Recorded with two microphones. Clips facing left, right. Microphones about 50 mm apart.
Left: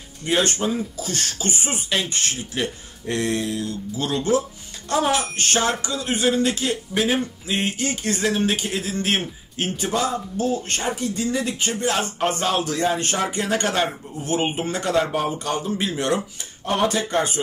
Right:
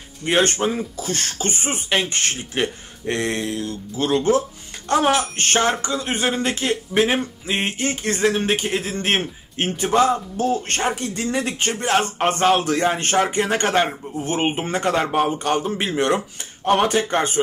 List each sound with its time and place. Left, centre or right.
0.2 s speech: right